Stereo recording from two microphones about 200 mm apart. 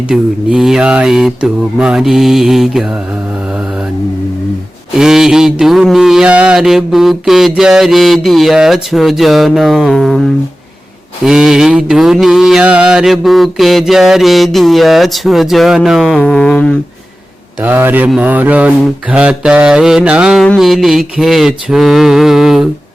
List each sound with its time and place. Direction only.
0.1 s mantra: 5° right (ahead or behind)
4.9 s mantra: centre (ahead or behind)
11.3 s mantra: 5° right (ahead or behind)
17.6 s mantra: 10° right (ahead or behind)